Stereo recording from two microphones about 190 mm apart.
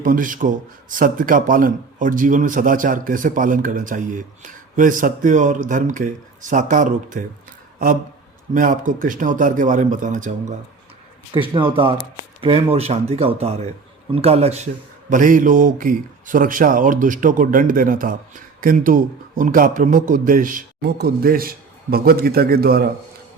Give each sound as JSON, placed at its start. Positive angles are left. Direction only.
{"t": 0.0, "sound": "a man's voice", "side_deg": -45}
{"t": 8.5, "sound": "a man's voice", "side_deg": -45}
{"t": 11.3, "sound": "speech", "side_deg": -25}
{"t": 15.1, "sound": "a man's voice", "side_deg": -45}